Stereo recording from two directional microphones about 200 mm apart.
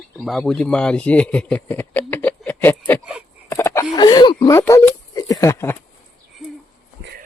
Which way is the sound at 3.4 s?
15° left (ahead or behind).